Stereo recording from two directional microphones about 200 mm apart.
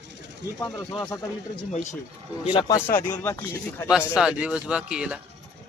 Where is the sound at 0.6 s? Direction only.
20° left (ahead or behind).